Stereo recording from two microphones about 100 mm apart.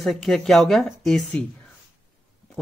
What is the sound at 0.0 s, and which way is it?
Speech, 5° left (ahead or behind).